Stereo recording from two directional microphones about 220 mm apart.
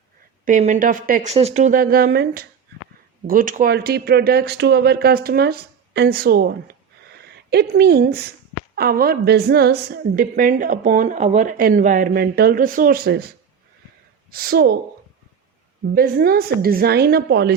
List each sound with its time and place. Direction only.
0.4 s a woman's voice: 35° right (ahead or behind)
16.0 s speech: 40° right (ahead or behind)